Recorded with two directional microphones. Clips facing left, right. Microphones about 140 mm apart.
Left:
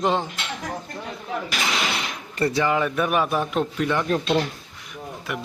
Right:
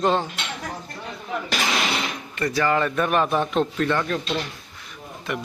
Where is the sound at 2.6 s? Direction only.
10° left (ahead or behind).